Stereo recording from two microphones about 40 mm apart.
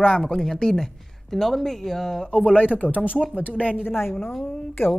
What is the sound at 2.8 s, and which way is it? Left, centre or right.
Speech, right.